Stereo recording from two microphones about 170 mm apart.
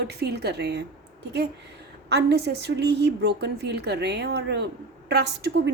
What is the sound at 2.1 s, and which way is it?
A woman's voice, 80° right.